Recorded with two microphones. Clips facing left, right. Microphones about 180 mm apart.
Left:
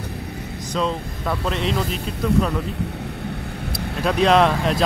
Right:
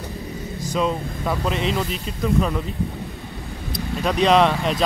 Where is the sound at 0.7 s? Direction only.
5° right (ahead or behind).